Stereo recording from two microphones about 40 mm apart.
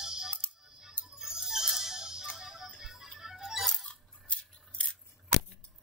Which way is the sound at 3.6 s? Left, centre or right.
Centre.